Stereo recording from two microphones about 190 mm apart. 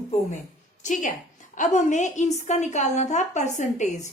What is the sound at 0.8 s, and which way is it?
A woman's voice, 40° left (ahead or behind).